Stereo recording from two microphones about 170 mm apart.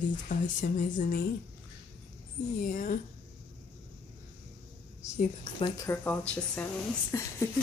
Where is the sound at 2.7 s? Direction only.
50° left (ahead or behind).